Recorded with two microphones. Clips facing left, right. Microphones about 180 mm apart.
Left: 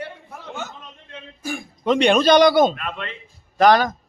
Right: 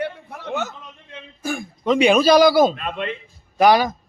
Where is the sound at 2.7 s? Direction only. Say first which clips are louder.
Right 4 dB; 20° right (ahead or behind).